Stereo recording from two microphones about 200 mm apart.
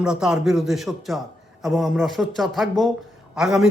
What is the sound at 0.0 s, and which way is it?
A man's voice, 5° right (ahead or behind).